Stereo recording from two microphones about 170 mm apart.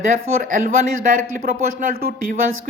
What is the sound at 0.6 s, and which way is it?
Speech, 60° right (ahead or behind).